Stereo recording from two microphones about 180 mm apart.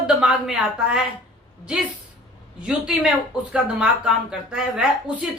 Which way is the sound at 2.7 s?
5° right (ahead or behind).